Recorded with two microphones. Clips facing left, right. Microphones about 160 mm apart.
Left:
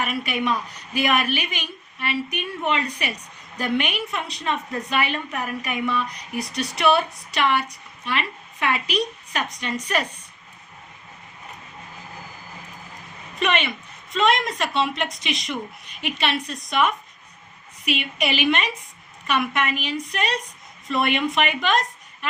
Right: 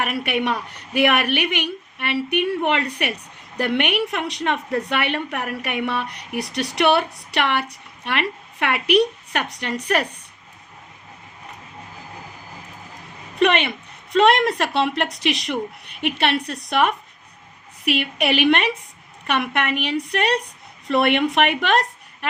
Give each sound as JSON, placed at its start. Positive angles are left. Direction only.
{"t": 0.0, "sound": "a woman's voice", "side_deg": -65}
{"t": 13.4, "sound": "a woman's voice", "side_deg": -60}